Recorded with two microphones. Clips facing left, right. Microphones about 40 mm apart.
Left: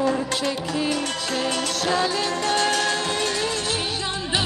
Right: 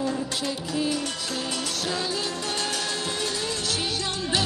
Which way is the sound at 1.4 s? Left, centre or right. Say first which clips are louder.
Left 6 dB; left.